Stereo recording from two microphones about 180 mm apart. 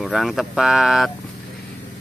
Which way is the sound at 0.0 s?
Centre (ahead or behind).